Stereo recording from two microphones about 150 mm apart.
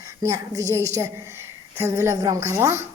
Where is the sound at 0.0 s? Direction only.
20° right (ahead or behind).